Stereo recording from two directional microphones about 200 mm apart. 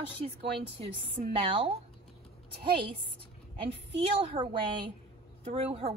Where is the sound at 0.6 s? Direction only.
25° right (ahead or behind).